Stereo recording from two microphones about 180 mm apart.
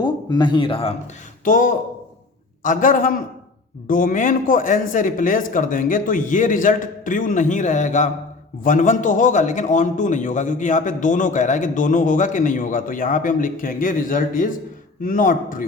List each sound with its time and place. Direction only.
0.0 s speech: 25° left (ahead or behind)
1.5 s a man's voice: 45° left (ahead or behind)